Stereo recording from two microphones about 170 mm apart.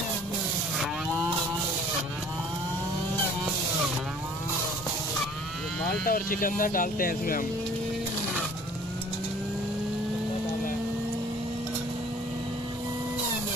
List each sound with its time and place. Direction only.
5.9 s speech: 60° left (ahead or behind)